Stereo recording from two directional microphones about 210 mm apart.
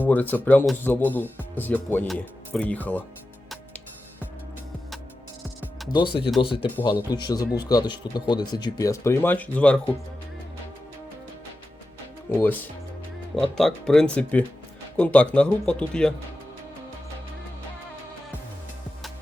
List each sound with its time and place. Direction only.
0.0 s speech: 10° left (ahead or behind)
5.9 s speech: 20° left (ahead or behind); by 9.8 s 5° left (ahead or behind)
13.3 s speech: centre (ahead or behind)